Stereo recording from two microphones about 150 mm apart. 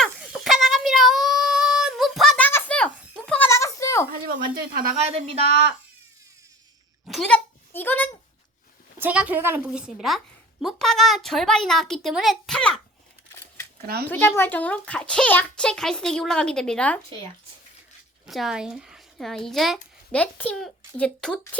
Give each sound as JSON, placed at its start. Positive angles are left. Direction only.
{"t": 0.0, "sound": "child singing", "side_deg": 0}
{"t": 2.5, "sound": "a sound", "side_deg": 10}
{"t": 4.1, "sound": "a sound", "side_deg": -80}
{"t": 4.9, "sound": "a woman's voice", "side_deg": -45}
{"t": 7.1, "sound": "speech", "side_deg": 5}
{"t": 9.0, "sound": "a woman's voice", "side_deg": -10}
{"t": 13.8, "sound": "a child's voice", "side_deg": -90}
{"t": 14.1, "sound": "a child's voice", "side_deg": 15}
{"t": 18.3, "sound": "speech", "side_deg": 0}
{"t": 20.1, "sound": "a child's voice", "side_deg": 10}